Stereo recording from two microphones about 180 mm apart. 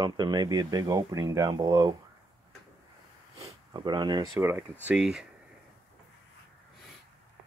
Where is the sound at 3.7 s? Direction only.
25° right (ahead or behind).